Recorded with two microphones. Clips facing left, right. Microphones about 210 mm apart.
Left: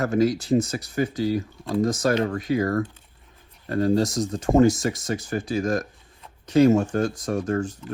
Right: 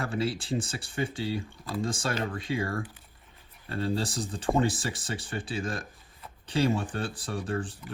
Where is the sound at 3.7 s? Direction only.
30° right (ahead or behind).